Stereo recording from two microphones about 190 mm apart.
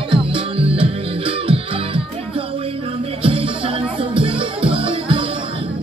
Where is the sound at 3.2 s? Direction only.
30° right (ahead or behind).